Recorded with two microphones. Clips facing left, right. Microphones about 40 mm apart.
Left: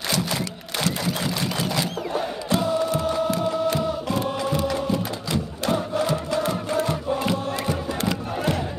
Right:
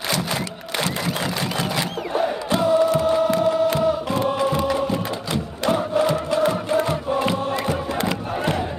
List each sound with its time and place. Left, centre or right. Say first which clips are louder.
0.1 s camera: right 1 dB; right